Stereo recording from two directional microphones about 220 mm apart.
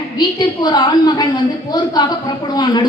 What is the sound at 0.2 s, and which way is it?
A woman's voice, 20° left (ahead or behind).